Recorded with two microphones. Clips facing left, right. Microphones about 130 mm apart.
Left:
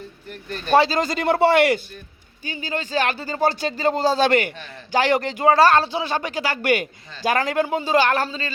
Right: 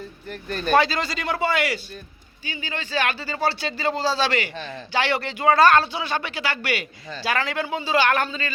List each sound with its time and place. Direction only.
0.7 s speech: 30° left (ahead or behind)
0.9 s speech: 50° left (ahead or behind)
2.4 s speech: 40° left (ahead or behind)
4.5 s a man's voice: 30° right (ahead or behind)
4.9 s speech: 40° left (ahead or behind)